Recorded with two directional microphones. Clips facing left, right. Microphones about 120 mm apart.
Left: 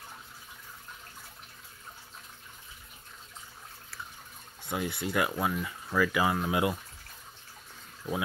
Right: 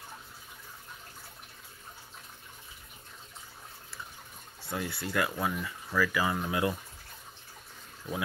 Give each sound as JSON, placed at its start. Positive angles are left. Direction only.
{"t": 4.6, "sound": "speech", "side_deg": 20}